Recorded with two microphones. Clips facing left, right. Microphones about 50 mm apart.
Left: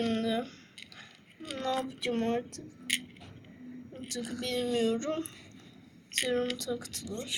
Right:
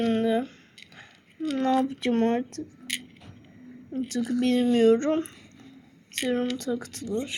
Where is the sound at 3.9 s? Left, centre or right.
Right.